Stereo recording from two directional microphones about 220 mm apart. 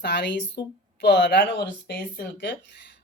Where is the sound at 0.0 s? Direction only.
50° left (ahead or behind).